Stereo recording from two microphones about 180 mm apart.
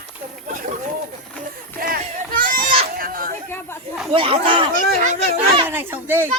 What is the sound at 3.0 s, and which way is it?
Chatter, 50° right (ahead or behind).